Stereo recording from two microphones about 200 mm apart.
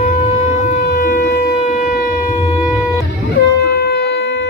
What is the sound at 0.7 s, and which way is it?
Shofar, 50° left (ahead or behind).